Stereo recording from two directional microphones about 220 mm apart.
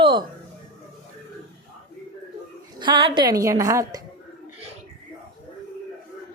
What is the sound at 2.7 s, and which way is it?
A woman's voice, 20° right (ahead or behind).